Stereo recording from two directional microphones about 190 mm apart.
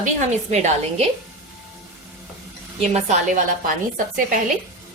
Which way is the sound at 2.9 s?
35° right (ahead or behind).